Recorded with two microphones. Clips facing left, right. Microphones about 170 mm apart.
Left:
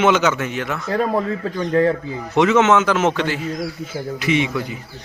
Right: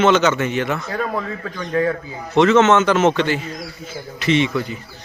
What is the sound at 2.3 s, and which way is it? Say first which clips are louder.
A man's voice: right 2 dB; 10° left (ahead or behind).